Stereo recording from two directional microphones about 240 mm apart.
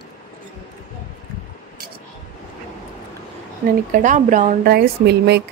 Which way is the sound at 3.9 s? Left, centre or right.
Right.